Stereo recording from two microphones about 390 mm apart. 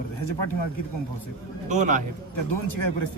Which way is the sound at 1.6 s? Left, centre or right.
Centre.